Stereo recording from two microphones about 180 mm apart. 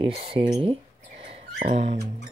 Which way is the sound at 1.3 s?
35° right (ahead or behind).